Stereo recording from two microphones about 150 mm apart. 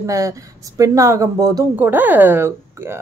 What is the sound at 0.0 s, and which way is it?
Speech, 20° right (ahead or behind).